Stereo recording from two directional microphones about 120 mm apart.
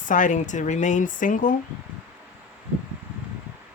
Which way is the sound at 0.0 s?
90° left.